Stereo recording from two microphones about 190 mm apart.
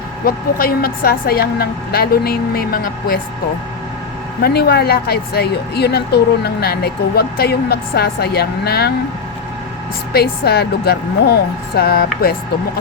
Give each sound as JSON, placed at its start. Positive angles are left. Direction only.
{"t": 0.3, "sound": "a woman's voice", "side_deg": 50}
{"t": 4.4, "sound": "speech", "side_deg": 55}
{"t": 10.1, "sound": "speech", "side_deg": 55}